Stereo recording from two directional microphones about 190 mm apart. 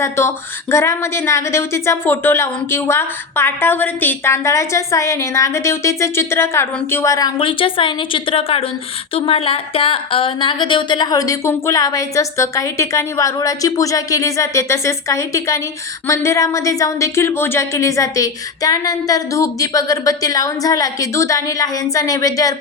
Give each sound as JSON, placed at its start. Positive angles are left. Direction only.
{"t": 0.0, "sound": "a woman's voice", "side_deg": 15}